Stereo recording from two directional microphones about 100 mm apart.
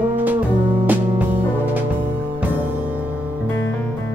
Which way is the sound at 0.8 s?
15° right (ahead or behind).